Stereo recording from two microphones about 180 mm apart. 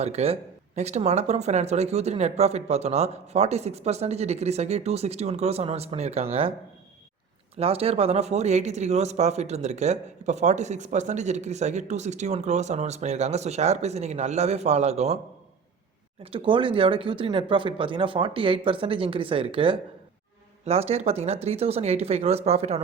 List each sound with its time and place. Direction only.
0.0 s speech: 35° right (ahead or behind)
7.5 s speech: 35° right (ahead or behind)
16.2 s speech: 30° right (ahead or behind)